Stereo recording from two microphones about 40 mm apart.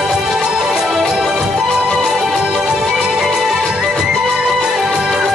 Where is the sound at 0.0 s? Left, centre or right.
Centre.